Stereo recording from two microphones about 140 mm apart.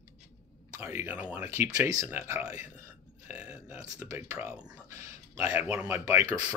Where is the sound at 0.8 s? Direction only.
15° right (ahead or behind).